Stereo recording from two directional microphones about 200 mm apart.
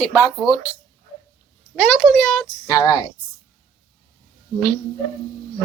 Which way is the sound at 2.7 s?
20° left (ahead or behind).